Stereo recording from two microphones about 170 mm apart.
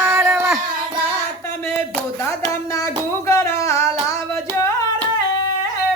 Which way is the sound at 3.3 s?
15° left (ahead or behind).